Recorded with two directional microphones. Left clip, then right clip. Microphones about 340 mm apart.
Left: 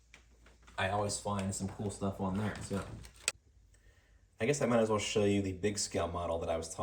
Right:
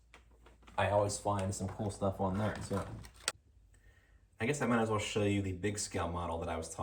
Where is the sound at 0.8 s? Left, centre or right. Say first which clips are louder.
Right 3 dB; right.